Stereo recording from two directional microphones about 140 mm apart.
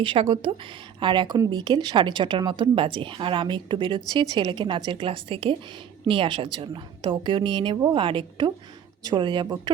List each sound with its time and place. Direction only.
0.0 s speech: 35° right (ahead or behind)